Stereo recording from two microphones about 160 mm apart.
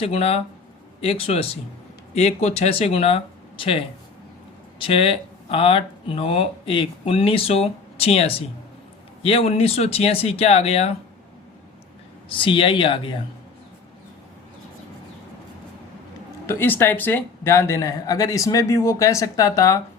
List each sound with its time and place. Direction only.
0.0 s speech: 40° left (ahead or behind)
12.3 s speech: 35° left (ahead or behind)
16.5 s speech: 15° left (ahead or behind)